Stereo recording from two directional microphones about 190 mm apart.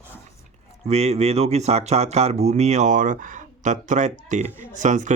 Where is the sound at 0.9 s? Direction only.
35° right (ahead or behind).